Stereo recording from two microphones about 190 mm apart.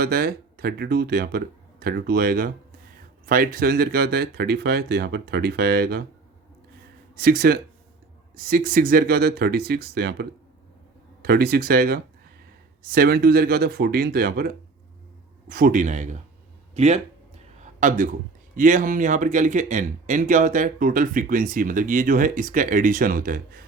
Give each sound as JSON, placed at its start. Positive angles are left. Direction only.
{"t": 0.0, "sound": "speech", "side_deg": -55}
{"t": 7.2, "sound": "speech", "side_deg": -50}
{"t": 17.6, "sound": "a sound", "side_deg": -45}
{"t": 18.5, "sound": "speech", "side_deg": -45}